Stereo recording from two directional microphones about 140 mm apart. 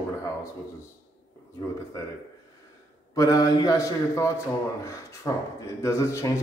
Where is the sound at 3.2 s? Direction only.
25° left (ahead or behind).